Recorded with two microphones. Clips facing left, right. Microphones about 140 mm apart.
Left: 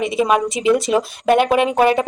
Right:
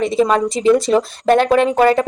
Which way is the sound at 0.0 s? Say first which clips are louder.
Right 2 dB; 10° left (ahead or behind).